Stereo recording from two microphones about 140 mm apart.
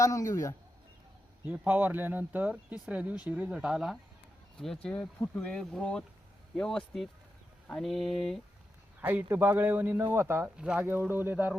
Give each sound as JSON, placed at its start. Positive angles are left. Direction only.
{"t": 0.0, "sound": "a man's voice", "side_deg": 25}
{"t": 1.5, "sound": "speech", "side_deg": -10}
{"t": 6.6, "sound": "a sound", "side_deg": 5}
{"t": 9.0, "sound": "speech", "side_deg": -15}